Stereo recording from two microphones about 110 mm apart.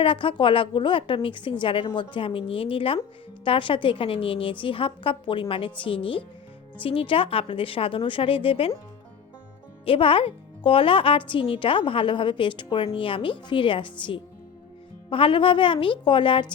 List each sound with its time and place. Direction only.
0.0 s a woman's voice: 50° left (ahead or behind)
9.8 s a woman's voice: 55° left (ahead or behind)
15.1 s a woman's voice: 55° left (ahead or behind)